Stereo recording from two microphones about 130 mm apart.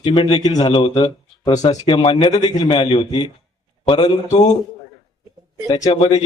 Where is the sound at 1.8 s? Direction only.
40° left (ahead or behind).